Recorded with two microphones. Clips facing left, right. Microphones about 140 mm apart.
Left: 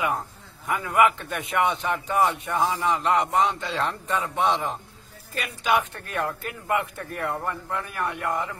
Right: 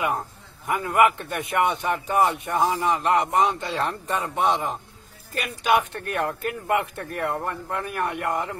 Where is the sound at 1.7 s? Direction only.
15° right (ahead or behind).